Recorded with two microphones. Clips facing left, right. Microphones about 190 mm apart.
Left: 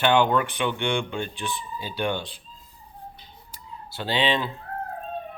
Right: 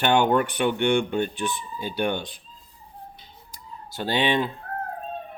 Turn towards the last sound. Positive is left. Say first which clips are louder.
# right 1 dB
turn(degrees=-50)  # may be behind; listen again after turning